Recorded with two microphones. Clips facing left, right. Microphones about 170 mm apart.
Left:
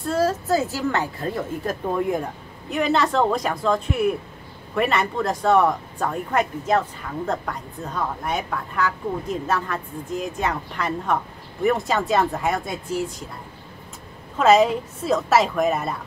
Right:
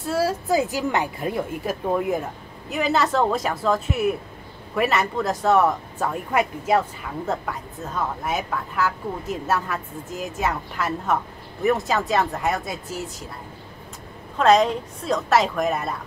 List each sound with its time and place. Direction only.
0.0 s a woman's voice: 10° right (ahead or behind)
14.4 s a woman's voice: 5° left (ahead or behind)